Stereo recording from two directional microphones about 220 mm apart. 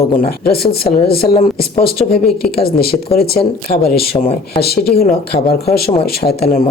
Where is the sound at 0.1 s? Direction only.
45° left (ahead or behind).